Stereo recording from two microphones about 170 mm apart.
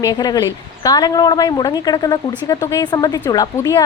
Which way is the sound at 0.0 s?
25° left (ahead or behind).